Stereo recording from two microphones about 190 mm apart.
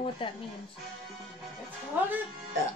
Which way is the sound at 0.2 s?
25° left (ahead or behind).